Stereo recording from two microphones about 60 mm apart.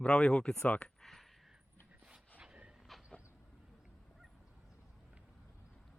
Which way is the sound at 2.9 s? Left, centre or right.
Centre.